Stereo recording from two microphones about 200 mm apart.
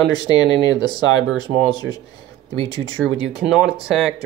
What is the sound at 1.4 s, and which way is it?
Speech, 20° left (ahead or behind).